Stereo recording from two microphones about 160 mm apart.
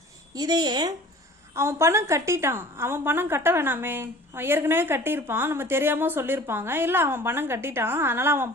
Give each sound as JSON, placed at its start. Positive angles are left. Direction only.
{"t": 0.3, "sound": "a woman's voice", "side_deg": -25}